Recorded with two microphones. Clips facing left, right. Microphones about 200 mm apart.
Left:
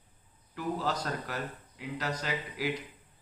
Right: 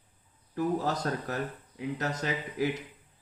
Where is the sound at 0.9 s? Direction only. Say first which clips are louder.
Right 3 dB; 25° right (ahead or behind).